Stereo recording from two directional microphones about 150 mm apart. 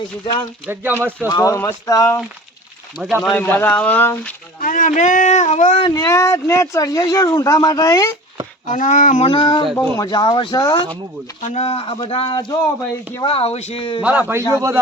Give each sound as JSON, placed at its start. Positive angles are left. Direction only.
{"t": 0.7, "sound": "speech", "side_deg": -15}
{"t": 1.3, "sound": "speech", "side_deg": 20}
{"t": 3.0, "sound": "speech", "side_deg": 0}
{"t": 3.3, "sound": "speech", "side_deg": 15}
{"t": 4.6, "sound": "speech", "side_deg": 60}
{"t": 5.8, "sound": "speech", "side_deg": 25}
{"t": 8.6, "sound": "speech", "side_deg": 55}
{"t": 9.2, "sound": "speech", "side_deg": 30}
{"t": 9.7, "sound": "speech", "side_deg": 20}
{"t": 11.4, "sound": "speech", "side_deg": 45}
{"t": 13.2, "sound": "speech", "side_deg": 40}
{"t": 14.0, "sound": "speech", "side_deg": -10}